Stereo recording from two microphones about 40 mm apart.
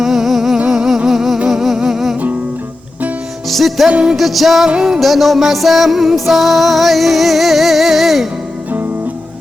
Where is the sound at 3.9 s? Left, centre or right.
Right.